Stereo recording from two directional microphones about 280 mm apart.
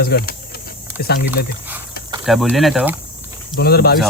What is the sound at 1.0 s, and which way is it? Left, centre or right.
Speech, left.